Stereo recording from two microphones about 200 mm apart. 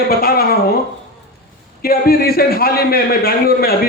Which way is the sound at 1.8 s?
50° left (ahead or behind).